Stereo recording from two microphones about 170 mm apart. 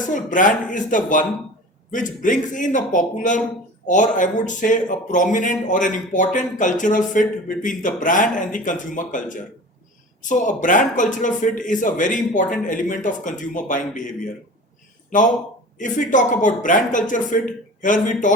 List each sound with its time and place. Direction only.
0.1 s speech: 50° left (ahead or behind)
15.8 s speech: 50° left (ahead or behind)